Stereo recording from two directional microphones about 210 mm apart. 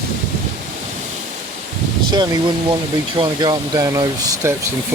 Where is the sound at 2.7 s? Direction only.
20° right (ahead or behind).